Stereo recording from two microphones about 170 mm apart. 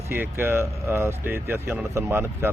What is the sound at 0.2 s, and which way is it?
Speech, 15° right (ahead or behind).